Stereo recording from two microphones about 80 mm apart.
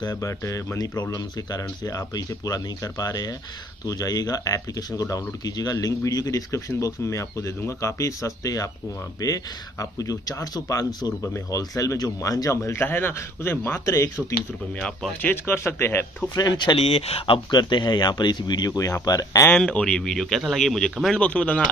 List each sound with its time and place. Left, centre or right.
0.2 s speech: left
12.7 s a man's voice: left
13.9 s speech: left
15.2 s speech: left
16.3 s speech: left
19.5 s speech: centre
21.2 s speech: centre